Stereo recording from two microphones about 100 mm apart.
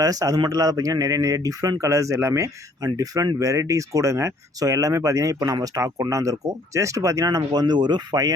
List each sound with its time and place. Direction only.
0.0 s speech: 35° right (ahead or behind)